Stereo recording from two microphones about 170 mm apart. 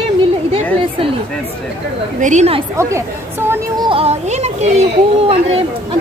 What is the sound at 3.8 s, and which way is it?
Speech, 35° right (ahead or behind).